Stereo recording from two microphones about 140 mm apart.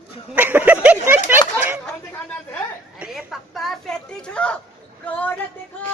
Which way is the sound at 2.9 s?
5° right (ahead or behind).